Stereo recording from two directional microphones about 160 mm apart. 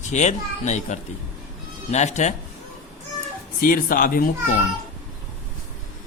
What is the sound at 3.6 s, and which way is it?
Speech, 60° left (ahead or behind).